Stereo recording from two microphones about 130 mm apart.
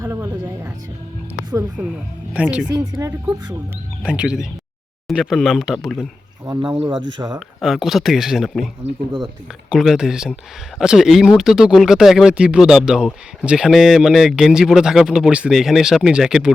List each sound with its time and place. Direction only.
0.0 s music: 20° right (ahead or behind)
1.8 s speech: 10° right (ahead or behind)
2.6 s speech: 30° right (ahead or behind)
4.0 s speech: 5° right (ahead or behind)
6.6 s speech: 40° right (ahead or behind)
7.3 s speech: centre (ahead or behind)